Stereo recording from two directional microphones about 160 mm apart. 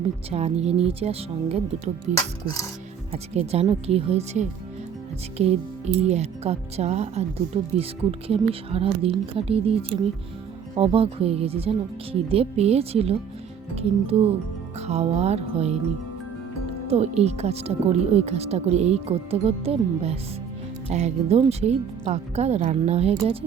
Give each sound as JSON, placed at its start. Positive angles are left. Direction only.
{"t": 0.3, "sound": "speech", "side_deg": -40}
{"t": 2.1, "sound": "dishes", "side_deg": 20}
{"t": 3.1, "sound": "speech", "side_deg": -40}
{"t": 16.9, "sound": "speech", "side_deg": -40}